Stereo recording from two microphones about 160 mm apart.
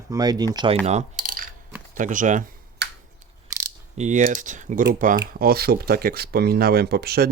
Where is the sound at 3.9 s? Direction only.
50° right (ahead or behind).